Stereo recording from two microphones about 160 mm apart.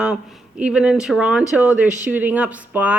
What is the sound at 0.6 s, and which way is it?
Speech, 5° right (ahead or behind).